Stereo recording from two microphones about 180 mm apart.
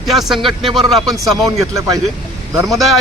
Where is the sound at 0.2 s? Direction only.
Centre (ahead or behind).